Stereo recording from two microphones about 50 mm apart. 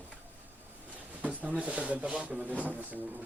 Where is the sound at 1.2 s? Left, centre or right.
Right.